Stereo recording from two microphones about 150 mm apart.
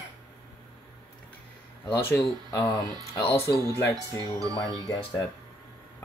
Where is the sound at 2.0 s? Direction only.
20° left (ahead or behind).